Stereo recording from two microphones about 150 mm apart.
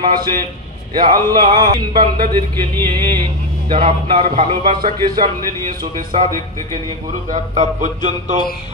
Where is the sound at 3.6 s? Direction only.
40° right (ahead or behind).